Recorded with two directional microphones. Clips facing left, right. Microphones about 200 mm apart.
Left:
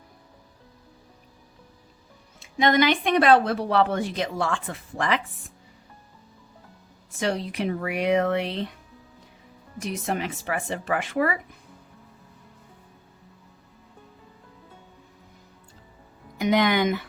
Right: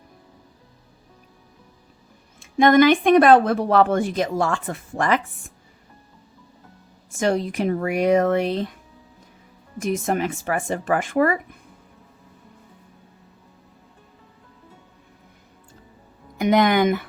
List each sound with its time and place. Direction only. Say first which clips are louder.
2.4 s speech: right 6 dB; 50° right (ahead or behind)
7.2 s speech: right 5 dB; 45° right (ahead or behind)
9.8 s speech: right 6 dB; 50° right (ahead or behind)
16.4 s speech: right 4 dB; 50° right (ahead or behind)